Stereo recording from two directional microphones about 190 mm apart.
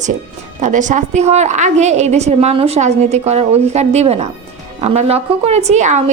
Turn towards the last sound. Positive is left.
turn(degrees=-40)  # may be behind; listen again after turning